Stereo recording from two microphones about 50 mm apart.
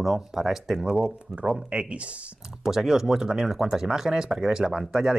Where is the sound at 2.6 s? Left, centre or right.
Centre.